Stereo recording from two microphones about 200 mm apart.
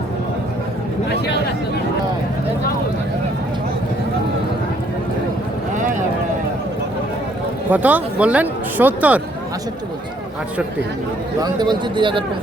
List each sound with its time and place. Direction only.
5.7 s a sound: 40° right (ahead or behind)
7.7 s speech: 10° right (ahead or behind)
11.3 s speech: 20° right (ahead or behind)